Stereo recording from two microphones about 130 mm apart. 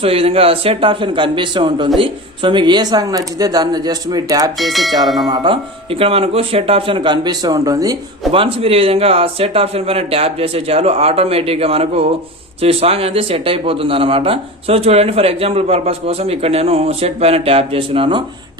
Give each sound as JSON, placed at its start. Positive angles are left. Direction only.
{"t": 0.0, "sound": "speech", "side_deg": -50}
{"t": 4.6, "sound": "bell", "side_deg": 0}
{"t": 5.3, "sound": "speech", "side_deg": -35}
{"t": 8.3, "sound": "speech", "side_deg": -45}